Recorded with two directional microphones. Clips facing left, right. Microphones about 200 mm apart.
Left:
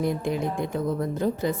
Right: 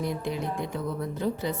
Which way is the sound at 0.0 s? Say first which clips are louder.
Left 4 dB; 50° left (ahead or behind).